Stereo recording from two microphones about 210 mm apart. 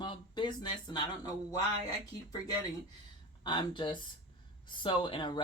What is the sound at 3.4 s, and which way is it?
Speech, 20° left (ahead or behind).